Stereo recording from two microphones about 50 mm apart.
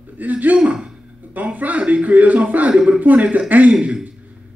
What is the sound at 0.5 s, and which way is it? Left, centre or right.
Speech, centre.